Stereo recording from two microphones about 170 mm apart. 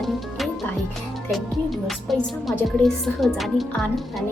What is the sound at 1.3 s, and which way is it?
Speech, centre (ahead or behind).